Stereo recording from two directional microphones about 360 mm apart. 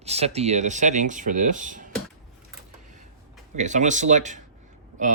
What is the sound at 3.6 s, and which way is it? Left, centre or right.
Speech, centre.